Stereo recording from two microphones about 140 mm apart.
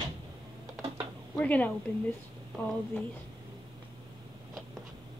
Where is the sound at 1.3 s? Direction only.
10° left (ahead or behind).